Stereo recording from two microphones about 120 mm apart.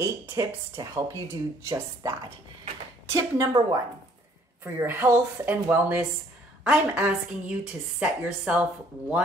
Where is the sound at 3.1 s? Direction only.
30° right (ahead or behind).